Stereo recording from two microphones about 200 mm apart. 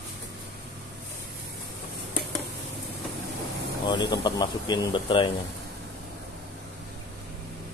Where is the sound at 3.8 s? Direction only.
20° left (ahead or behind).